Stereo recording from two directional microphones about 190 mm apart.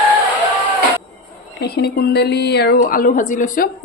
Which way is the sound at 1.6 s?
60° left (ahead or behind).